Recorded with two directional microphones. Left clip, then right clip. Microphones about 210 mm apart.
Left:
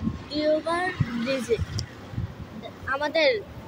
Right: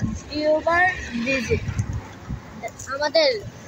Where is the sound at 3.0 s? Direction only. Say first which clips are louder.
Right 4 dB; 30° left (ahead or behind).